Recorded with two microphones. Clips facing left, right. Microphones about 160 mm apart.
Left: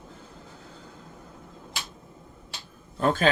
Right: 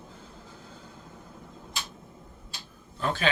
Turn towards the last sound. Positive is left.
turn(degrees=45)  # may be behind; listen again after turning